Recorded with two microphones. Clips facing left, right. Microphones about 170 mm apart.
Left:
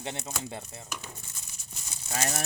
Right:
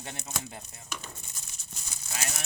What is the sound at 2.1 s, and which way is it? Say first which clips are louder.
Speech: left 7 dB; 50° left (ahead or behind).